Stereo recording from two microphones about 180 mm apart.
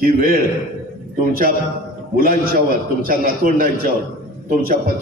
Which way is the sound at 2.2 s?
50° right (ahead or behind).